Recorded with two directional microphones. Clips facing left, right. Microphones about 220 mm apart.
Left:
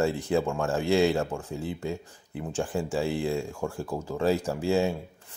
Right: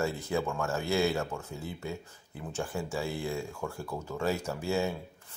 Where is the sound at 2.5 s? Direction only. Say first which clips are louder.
Left 5 dB; 30° left (ahead or behind).